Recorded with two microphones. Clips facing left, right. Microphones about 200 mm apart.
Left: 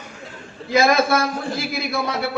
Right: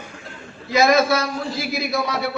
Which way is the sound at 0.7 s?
55° left (ahead or behind).